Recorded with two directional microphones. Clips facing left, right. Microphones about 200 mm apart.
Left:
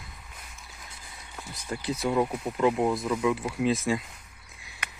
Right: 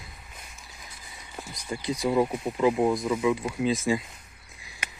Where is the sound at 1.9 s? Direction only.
5° left (ahead or behind).